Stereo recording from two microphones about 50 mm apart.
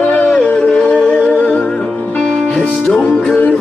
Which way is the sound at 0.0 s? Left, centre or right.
Left.